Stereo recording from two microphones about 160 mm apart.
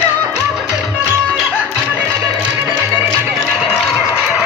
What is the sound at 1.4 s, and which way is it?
Music, centre (ahead or behind).